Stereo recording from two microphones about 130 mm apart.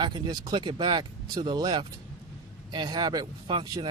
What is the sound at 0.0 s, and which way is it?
Speech, 35° right (ahead or behind).